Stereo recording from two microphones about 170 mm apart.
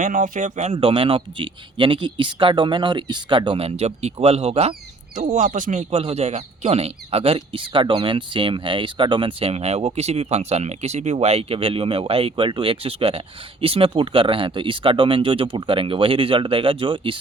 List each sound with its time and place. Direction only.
0.0 s speech: 50° right (ahead or behind); by 17.2 s 30° right (ahead or behind)